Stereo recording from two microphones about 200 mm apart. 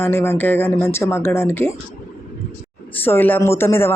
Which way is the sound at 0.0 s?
10° left (ahead or behind).